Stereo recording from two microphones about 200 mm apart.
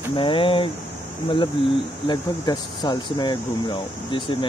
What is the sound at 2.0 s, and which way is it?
Speech, 20° left (ahead or behind).